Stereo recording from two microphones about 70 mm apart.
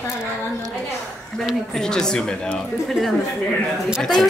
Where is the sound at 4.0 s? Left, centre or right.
Centre.